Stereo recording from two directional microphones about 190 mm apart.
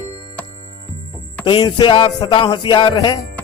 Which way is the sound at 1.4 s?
25° left (ahead or behind).